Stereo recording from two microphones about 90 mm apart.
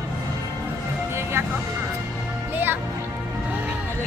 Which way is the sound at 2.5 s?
20° right (ahead or behind).